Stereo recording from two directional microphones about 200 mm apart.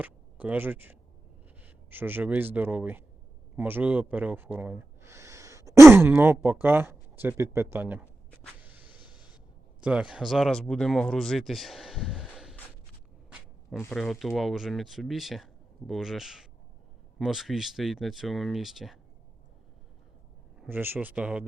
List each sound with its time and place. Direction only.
0.0 s speech: 10° right (ahead or behind)
8.6 s a sound: 10° right (ahead or behind)
9.8 s speech: 5° right (ahead or behind)
13.7 s speech: centre (ahead or behind)
20.6 s speech: 10° right (ahead or behind)